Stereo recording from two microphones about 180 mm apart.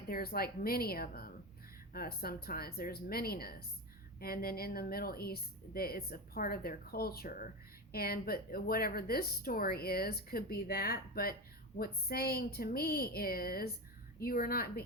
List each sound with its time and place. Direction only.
0.1 s speech: 55° left (ahead or behind)